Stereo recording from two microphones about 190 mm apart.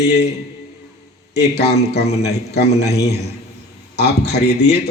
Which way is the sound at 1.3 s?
60° left (ahead or behind).